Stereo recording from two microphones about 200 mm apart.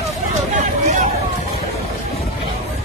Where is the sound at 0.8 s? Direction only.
40° right (ahead or behind).